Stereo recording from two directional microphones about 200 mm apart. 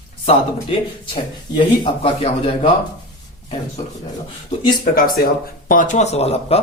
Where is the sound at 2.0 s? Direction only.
25° left (ahead or behind).